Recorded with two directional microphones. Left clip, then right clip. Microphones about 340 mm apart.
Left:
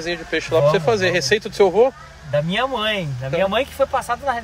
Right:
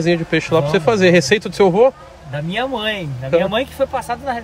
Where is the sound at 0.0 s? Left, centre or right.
Centre.